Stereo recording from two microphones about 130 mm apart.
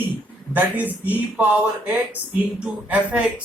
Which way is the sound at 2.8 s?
10° right (ahead or behind).